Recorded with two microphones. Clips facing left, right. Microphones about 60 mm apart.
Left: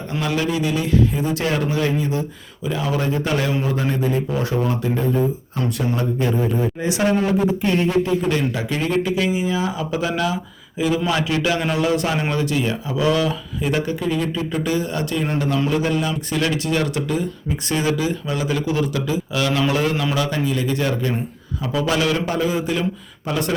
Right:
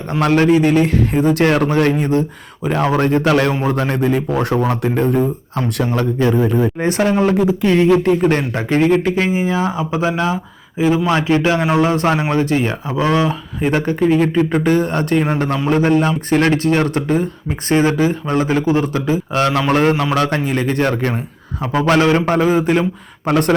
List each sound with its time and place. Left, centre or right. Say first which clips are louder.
0.2 s a man's voice: right 9 dB; right
3.2 s speech: right 8 dB; right
3.5 s a man's voice: right 4 dB; right
6.7 s a man's voice: right 4 dB; right
7.2 s speech: right 5 dB; right
8.2 s a man's voice: right 5 dB; right
20.1 s a man's voice: right 4 dB; right
23.2 s a man's voice: right 8 dB; right